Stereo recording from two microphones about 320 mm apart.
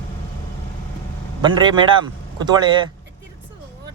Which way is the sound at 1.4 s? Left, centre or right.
Centre.